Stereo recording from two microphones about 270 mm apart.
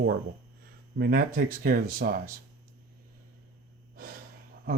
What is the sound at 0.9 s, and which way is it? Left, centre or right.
Speech, right.